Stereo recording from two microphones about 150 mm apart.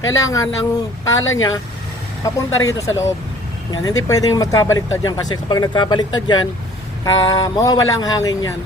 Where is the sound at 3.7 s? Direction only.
25° left (ahead or behind).